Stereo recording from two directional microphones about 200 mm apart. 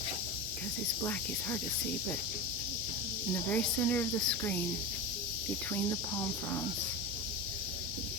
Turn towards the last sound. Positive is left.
turn(degrees=10)  # may be behind; listen again after turning